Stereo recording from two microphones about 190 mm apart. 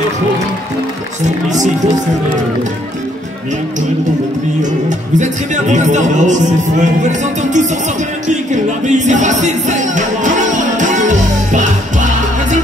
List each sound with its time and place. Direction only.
4.6 s speech: 40° right (ahead or behind)
8.8 s music: 40° right (ahead or behind)